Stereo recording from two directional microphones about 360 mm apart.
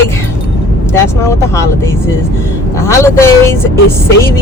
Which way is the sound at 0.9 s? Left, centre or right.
Centre.